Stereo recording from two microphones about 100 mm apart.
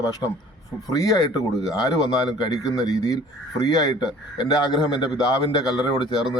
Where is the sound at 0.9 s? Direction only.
35° left (ahead or behind).